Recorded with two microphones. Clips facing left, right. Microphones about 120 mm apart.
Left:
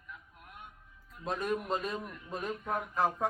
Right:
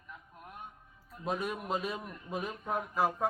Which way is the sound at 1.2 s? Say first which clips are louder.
Left 1 dB; 5° right (ahead or behind).